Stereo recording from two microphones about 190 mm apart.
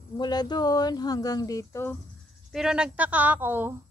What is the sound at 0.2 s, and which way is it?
Speech, 20° left (ahead or behind).